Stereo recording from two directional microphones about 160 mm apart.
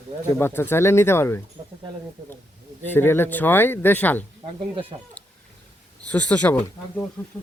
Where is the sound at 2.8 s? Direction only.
15° left (ahead or behind).